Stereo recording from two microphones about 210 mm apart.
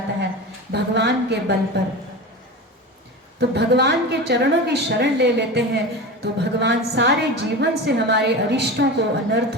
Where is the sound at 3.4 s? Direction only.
55° right (ahead or behind).